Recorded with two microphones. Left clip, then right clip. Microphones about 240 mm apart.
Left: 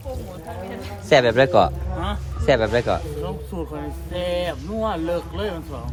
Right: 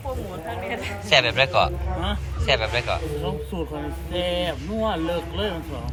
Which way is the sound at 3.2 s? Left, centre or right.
Centre.